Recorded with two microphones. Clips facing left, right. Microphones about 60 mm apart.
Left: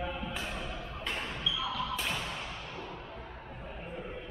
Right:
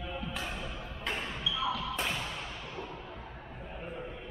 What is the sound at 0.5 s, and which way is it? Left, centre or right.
Music, centre.